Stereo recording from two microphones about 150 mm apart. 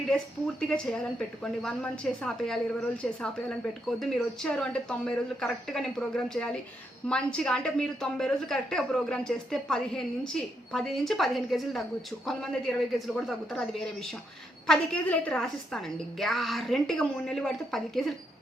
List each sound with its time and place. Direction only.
1.6 s a woman's voice: 5° left (ahead or behind)